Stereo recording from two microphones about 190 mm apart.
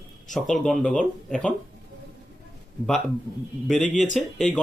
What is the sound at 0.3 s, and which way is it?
Speech, centre (ahead or behind).